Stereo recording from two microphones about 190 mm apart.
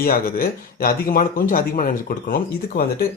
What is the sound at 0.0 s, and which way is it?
Speech, 50° left (ahead or behind).